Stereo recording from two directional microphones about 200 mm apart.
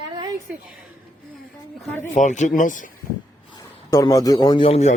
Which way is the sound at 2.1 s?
40° left (ahead or behind).